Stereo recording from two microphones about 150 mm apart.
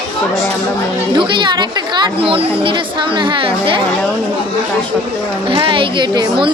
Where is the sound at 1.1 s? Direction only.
30° right (ahead or behind).